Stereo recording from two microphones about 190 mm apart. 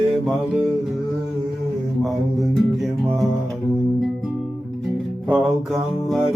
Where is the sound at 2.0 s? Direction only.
Centre (ahead or behind).